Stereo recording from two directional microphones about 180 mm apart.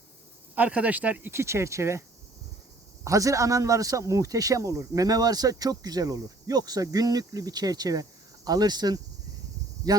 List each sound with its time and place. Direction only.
0.5 s speech: 10° right (ahead or behind)